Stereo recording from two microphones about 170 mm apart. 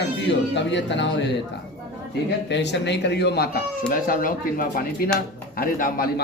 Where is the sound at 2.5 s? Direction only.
90° left.